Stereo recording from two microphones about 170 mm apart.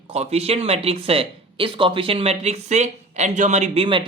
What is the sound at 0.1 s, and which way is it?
Speech, 35° right (ahead or behind).